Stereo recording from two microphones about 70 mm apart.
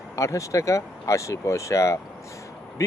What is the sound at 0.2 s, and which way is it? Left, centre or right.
Speech, left.